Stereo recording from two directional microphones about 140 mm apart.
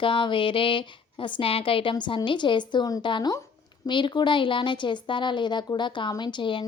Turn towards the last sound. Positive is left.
turn(degrees=35)  # may be behind; listen again after turning